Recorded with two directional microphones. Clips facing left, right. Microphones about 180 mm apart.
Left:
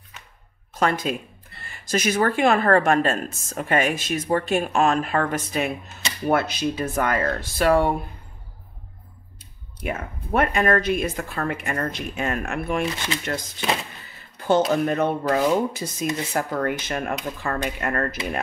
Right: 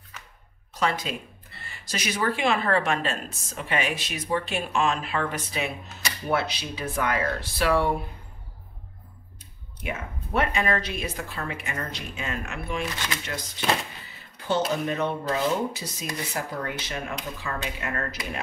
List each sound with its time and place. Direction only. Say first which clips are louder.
0.7 s a woman's voice: left 5 dB; 50° left (ahead or behind)
9.8 s a woman's voice: left 5 dB; 50° left (ahead or behind)
14.7 s a woman's voice: left 5 dB; 50° left (ahead or behind)